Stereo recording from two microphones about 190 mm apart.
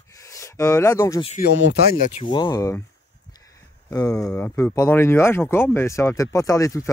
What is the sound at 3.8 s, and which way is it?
Speech, 20° left (ahead or behind).